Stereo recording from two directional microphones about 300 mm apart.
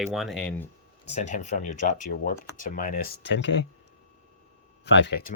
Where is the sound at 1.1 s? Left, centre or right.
Left.